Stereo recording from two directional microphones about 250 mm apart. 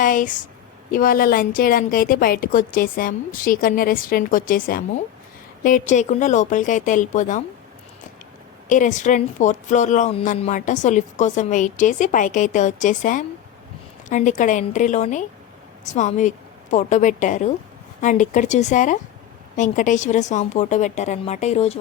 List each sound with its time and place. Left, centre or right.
0.0 s a woman's voice: left
8.7 s speech: left